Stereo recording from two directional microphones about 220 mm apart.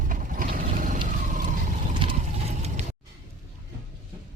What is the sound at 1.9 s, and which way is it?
Vehicle, 25° right (ahead or behind).